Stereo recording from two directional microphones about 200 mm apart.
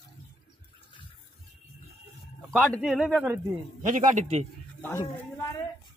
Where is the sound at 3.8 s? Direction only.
40° right (ahead or behind).